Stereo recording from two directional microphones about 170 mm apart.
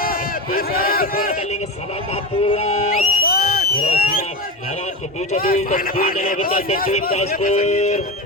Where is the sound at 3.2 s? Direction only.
60° left (ahead or behind).